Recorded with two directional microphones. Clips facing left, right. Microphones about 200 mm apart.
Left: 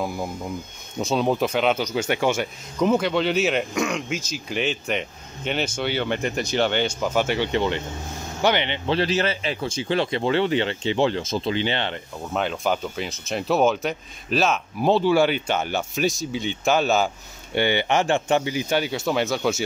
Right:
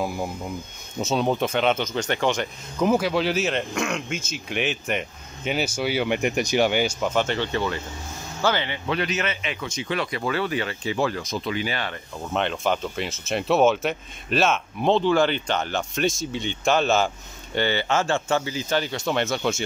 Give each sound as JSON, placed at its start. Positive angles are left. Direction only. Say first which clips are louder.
{"t": 0.9, "sound": "speech", "louder": "left 1 dB", "side_deg": 0}
{"t": 2.8, "sound": "speech", "louder": "left 1 dB", "side_deg": -5}
{"t": 12.3, "sound": "speech", "louder": "even", "side_deg": 5}
{"t": 17.6, "sound": "speech", "louder": "left 2 dB", "side_deg": 15}